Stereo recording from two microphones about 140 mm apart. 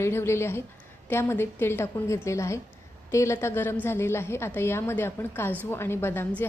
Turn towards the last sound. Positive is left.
turn(degrees=15)  # may be behind; listen again after turning